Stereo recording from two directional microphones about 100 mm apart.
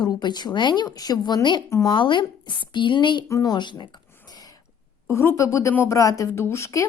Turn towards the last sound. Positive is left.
turn(degrees=30)  # may be behind; listen again after turning